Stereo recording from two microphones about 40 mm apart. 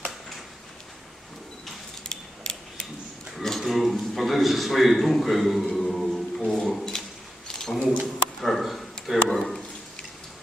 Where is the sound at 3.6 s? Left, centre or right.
Centre.